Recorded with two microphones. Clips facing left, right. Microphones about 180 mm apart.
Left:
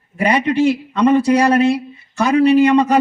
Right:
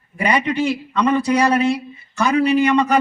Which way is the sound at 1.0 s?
45° left (ahead or behind).